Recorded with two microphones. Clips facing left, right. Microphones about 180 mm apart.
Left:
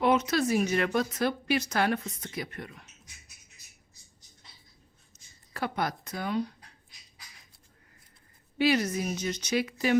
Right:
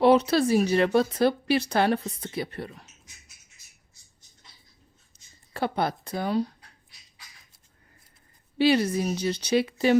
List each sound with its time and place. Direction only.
0.0 s speech: 35° right (ahead or behind)
5.1 s a sound: 35° right (ahead or behind)
5.5 s speech: 30° right (ahead or behind)
8.5 s speech: 30° right (ahead or behind)